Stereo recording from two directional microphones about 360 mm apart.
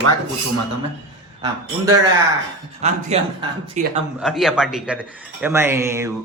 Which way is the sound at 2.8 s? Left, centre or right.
Centre.